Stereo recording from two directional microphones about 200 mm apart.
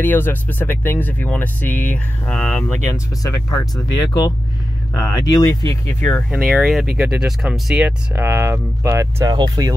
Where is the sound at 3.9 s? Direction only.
20° left (ahead or behind); by 9.7 s 20° right (ahead or behind).